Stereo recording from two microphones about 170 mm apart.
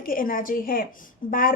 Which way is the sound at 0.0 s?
55° left (ahead or behind).